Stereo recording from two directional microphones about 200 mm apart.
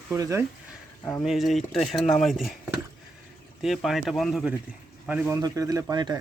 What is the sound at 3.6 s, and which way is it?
Speech, centre (ahead or behind).